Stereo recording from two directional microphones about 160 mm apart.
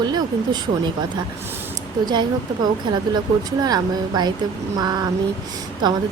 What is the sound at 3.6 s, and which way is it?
Speech, 25° right (ahead or behind).